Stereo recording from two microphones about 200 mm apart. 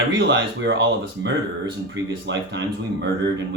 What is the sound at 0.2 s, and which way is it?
Speech, 60° right (ahead or behind).